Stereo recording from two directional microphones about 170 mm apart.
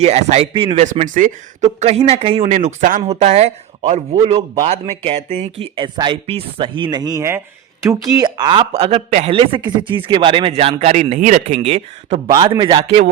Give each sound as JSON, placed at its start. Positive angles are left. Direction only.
{"t": 0.0, "sound": "speech", "side_deg": -40}
{"t": 12.3, "sound": "speech", "side_deg": -25}